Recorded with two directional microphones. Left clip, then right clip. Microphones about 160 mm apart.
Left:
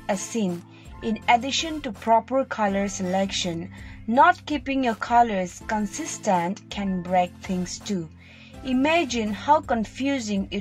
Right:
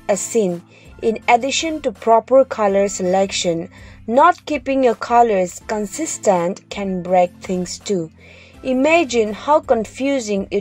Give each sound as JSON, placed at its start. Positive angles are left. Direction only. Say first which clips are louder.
{"t": 1.0, "sound": "speech", "louder": "right 6 dB", "side_deg": -35}